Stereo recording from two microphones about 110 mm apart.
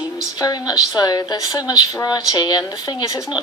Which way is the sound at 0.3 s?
35° left (ahead or behind).